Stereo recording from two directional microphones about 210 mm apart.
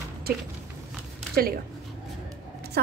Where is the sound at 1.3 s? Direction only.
45° right (ahead or behind).